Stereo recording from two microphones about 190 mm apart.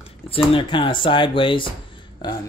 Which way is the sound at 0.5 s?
25° left (ahead or behind).